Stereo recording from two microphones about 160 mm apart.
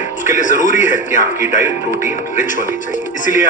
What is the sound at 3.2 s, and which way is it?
Speech, 55° left (ahead or behind).